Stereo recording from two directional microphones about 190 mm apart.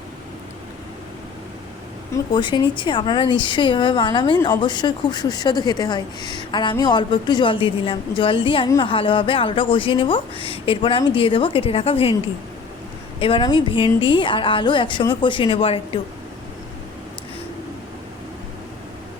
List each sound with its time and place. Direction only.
2.3 s speech: 25° left (ahead or behind)
13.1 s speech: 30° left (ahead or behind)